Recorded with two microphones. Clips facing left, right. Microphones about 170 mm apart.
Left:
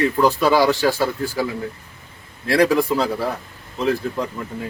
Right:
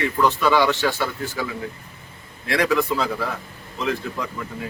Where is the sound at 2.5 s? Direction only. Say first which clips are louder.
Left 4 dB; 35° left (ahead or behind).